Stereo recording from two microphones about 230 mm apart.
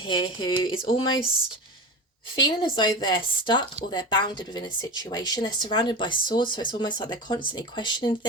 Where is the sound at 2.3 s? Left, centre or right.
Centre.